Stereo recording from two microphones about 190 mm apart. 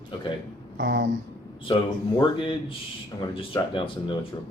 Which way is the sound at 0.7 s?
65° right (ahead or behind).